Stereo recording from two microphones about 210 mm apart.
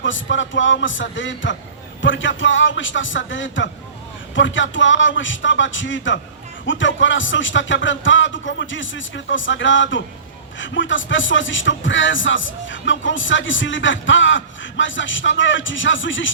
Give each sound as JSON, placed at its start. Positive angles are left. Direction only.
{"t": 0.0, "sound": "speech", "side_deg": 65}